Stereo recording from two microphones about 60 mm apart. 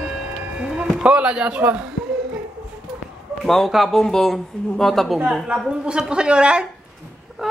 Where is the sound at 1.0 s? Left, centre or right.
Centre.